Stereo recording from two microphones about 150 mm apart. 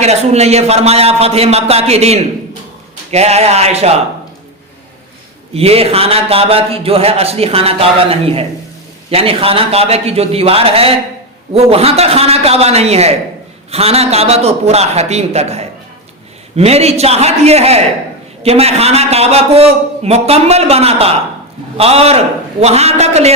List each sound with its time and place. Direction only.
0.0 s a man's voice: 45° right (ahead or behind)
5.5 s a man's voice: 40° right (ahead or behind)